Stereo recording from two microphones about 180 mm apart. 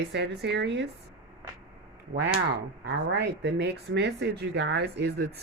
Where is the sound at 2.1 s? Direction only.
65° right (ahead or behind).